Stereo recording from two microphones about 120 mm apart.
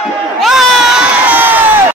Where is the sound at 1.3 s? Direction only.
15° right (ahead or behind).